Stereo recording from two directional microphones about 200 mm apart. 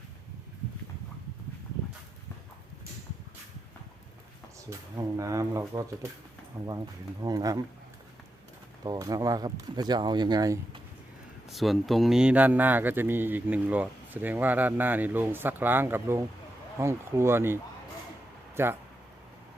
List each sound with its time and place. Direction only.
4.7 s speech: 15° right (ahead or behind)
7.2 s speech: 20° right (ahead or behind)
8.8 s speech: 20° right (ahead or behind)
11.4 s speech: centre (ahead or behind)